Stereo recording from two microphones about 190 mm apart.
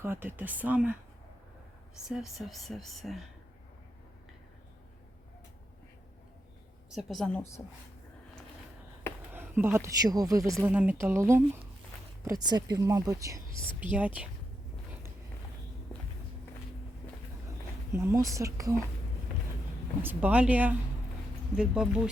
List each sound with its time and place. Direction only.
0.0 s a woman's voice: 10° right (ahead or behind)
2.0 s speech: centre (ahead or behind)
6.9 s speech: centre (ahead or behind)
9.3 s a woman's voice: 10° right (ahead or behind)
17.9 s a woman's voice: 15° right (ahead or behind)
20.0 s a woman's voice: 10° right (ahead or behind)